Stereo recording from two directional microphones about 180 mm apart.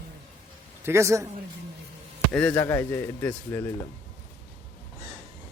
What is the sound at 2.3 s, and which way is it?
Speech, 10° left (ahead or behind).